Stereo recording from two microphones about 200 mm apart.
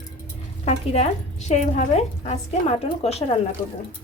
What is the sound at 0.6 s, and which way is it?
A woman's voice, 35° left (ahead or behind).